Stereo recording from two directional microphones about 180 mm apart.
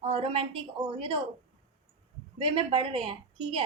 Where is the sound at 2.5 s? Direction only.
30° right (ahead or behind).